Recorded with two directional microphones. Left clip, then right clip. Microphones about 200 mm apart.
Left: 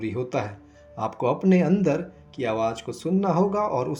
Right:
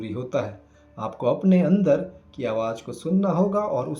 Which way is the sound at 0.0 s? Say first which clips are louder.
Even; 30° left (ahead or behind).